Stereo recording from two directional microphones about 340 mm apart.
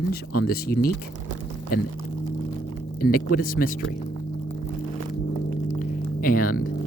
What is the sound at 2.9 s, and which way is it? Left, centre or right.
Speech, left.